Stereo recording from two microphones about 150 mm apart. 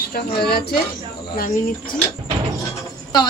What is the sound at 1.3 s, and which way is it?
Speech, 70° left (ahead or behind).